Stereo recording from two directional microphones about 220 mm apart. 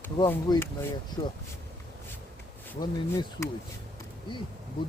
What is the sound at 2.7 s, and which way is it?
Speech, 15° left (ahead or behind).